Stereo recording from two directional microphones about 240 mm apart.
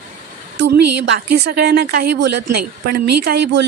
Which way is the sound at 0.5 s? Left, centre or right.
Right.